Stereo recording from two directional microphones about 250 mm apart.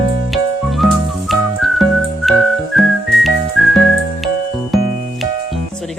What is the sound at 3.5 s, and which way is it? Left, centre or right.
Music, centre.